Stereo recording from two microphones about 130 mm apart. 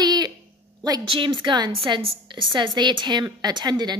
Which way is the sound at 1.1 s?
40° right (ahead or behind).